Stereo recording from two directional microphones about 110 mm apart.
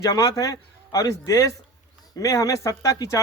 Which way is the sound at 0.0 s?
35° left (ahead or behind).